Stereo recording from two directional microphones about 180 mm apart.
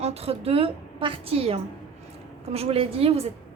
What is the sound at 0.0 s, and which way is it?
A woman's voice, 35° right (ahead or behind).